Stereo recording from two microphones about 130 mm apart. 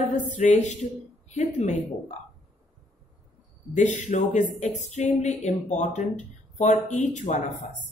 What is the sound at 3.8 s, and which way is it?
Speech, 70° left (ahead or behind).